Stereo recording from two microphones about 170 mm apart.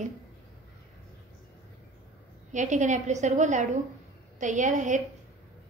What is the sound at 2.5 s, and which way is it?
A woman's voice, 45° right (ahead or behind).